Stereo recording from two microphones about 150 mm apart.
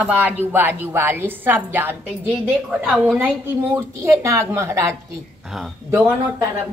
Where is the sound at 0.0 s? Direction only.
10° right (ahead or behind).